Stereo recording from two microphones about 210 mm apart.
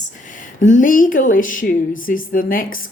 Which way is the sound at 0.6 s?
35° left (ahead or behind).